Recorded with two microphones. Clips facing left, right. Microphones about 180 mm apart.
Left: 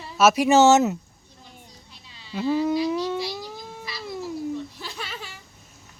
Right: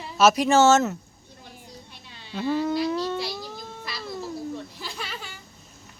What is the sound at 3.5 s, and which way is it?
Cat, 10° left (ahead or behind).